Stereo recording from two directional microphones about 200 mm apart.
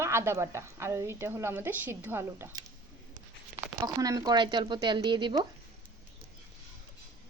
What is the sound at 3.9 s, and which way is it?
Speech, 20° right (ahead or behind).